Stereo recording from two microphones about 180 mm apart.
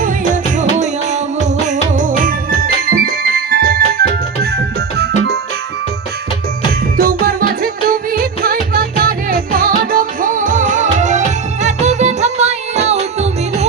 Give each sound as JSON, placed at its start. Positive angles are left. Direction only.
{"t": 0.5, "sound": "music", "side_deg": -40}
{"t": 6.9, "sound": "music", "side_deg": -55}